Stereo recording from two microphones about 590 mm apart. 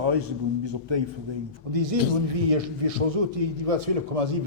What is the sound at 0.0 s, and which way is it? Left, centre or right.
A man's voice, right.